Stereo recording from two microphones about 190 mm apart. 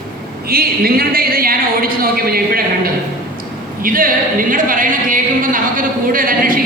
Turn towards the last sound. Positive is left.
turn(degrees=-45)  # may be behind; listen again after turning